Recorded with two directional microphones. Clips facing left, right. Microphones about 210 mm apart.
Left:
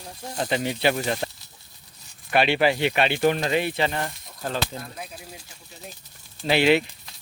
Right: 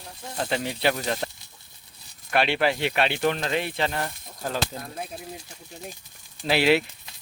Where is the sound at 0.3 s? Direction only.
5° left (ahead or behind).